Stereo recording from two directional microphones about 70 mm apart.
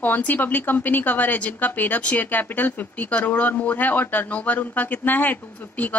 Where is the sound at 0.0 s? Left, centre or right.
Left.